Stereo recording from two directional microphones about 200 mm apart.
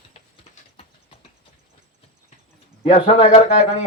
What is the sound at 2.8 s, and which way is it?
Speech, 30° left (ahead or behind).